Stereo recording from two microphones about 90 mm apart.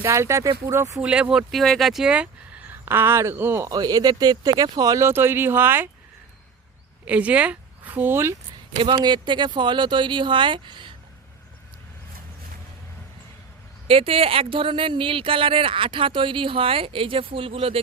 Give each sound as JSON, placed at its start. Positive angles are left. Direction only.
{"t": 0.0, "sound": "speech", "side_deg": -30}
{"t": 0.9, "sound": "speech", "side_deg": -15}
{"t": 2.8, "sound": "speech", "side_deg": -25}
{"t": 3.7, "sound": "speech", "side_deg": -45}
{"t": 5.0, "sound": "speech", "side_deg": -25}
{"t": 7.0, "sound": "a woman's voice", "side_deg": -15}
{"t": 8.8, "sound": "speech", "side_deg": -60}
{"t": 13.8, "sound": "speech", "side_deg": -90}